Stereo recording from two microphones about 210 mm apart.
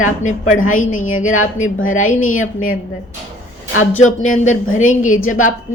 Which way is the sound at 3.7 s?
75° left (ahead or behind).